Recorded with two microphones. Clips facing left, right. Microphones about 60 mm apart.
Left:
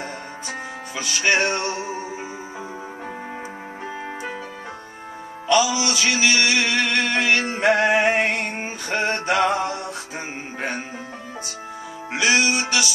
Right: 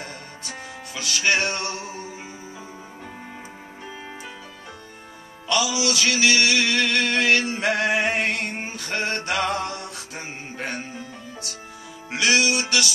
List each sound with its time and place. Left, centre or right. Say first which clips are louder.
0.0 s music: left 5 dB; centre
5.8 s music: left 1 dB; centre
7.5 s male singing: left 4 dB; centre
12.1 s music: left 1 dB; centre